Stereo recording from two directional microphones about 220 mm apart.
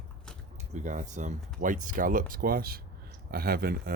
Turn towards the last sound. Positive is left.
turn(degrees=-45)  # may be behind; listen again after turning